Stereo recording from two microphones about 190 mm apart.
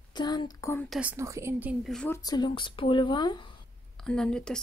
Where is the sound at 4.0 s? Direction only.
5° left (ahead or behind).